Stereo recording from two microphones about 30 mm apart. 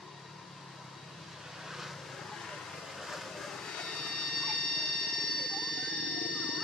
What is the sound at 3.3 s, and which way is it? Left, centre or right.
Train, centre.